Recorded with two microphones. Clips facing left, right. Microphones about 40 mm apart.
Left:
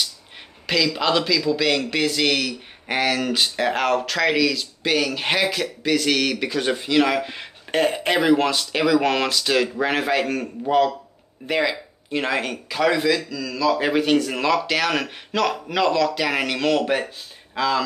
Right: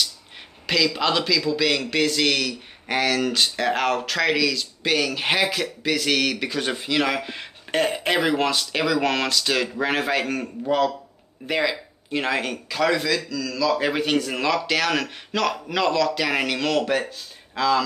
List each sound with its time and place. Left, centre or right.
0.7 s a man's voice: centre